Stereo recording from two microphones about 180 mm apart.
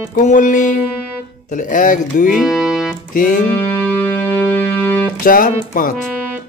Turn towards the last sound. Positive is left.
turn(degrees=50)  # may be behind; listen again after turning